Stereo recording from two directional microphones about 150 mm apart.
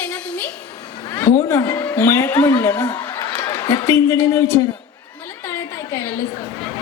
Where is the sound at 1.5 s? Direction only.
20° left (ahead or behind).